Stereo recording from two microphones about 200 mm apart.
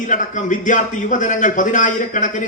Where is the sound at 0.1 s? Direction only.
40° left (ahead or behind).